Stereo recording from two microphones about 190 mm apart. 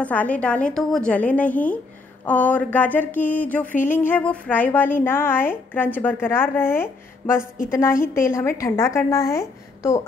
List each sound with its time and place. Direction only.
0.0 s a woman's voice: 10° left (ahead or behind)